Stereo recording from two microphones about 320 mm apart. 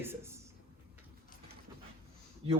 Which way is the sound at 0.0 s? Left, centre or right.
Centre.